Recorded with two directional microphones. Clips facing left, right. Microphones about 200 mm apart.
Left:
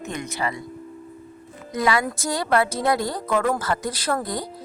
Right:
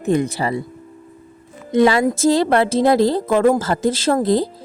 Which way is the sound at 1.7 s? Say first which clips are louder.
Right 9 dB; 25° right (ahead or behind).